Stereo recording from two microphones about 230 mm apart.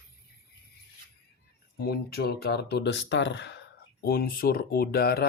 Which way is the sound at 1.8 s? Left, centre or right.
Left.